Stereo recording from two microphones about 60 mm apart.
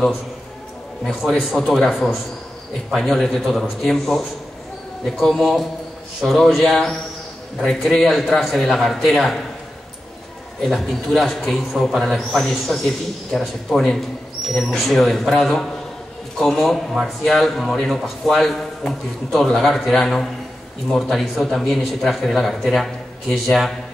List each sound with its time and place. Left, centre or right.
1.0 s a man's voice: centre
5.4 s a man's voice: centre
10.6 s a man's voice: centre